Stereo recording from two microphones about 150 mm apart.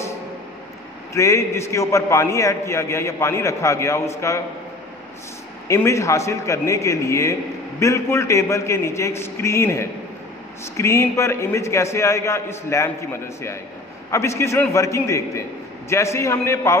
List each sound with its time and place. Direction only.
1.1 s a man's voice: 20° left (ahead or behind)
5.7 s a man's voice: 20° left (ahead or behind)